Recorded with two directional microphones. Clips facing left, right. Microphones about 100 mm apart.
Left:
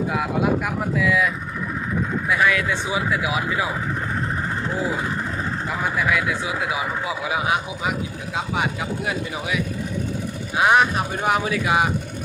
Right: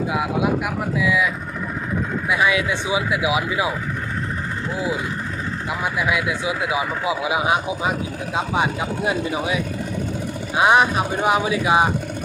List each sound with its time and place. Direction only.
0.1 s speech: 5° right (ahead or behind)
2.3 s speech: 15° right (ahead or behind)
6.0 s speech: 15° right (ahead or behind)
10.6 s speech: 20° right (ahead or behind)